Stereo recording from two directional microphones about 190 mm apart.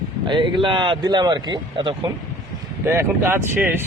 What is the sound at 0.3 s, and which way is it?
Speech, 25° right (ahead or behind).